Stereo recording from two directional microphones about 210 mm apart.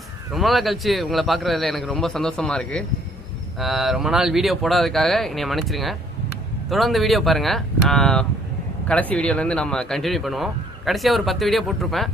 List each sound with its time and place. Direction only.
0.3 s speech: centre (ahead or behind)